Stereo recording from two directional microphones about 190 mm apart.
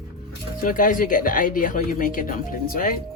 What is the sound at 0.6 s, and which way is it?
Speech, 45° left (ahead or behind).